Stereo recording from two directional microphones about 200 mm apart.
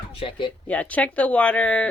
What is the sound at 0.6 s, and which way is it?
Speech, 5° left (ahead or behind).